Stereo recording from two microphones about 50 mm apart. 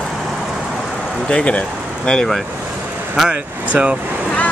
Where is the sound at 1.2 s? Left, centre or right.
Left.